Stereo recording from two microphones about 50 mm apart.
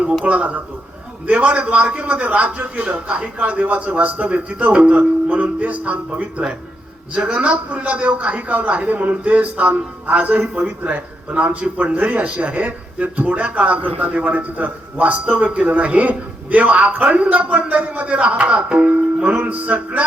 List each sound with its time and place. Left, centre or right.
0.3 s a man's voice: right